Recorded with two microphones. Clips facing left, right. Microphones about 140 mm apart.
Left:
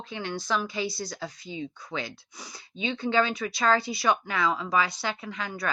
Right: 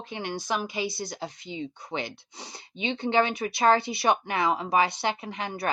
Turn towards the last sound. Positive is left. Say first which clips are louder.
# right 2 dB
turn(degrees=-25)  # may be behind; listen again after turning